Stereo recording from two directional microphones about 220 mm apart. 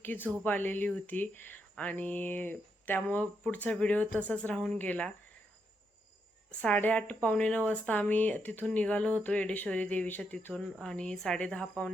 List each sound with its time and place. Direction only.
0.0 s a woman's voice: 10° left (ahead or behind)
6.6 s a woman's voice: 5° left (ahead or behind)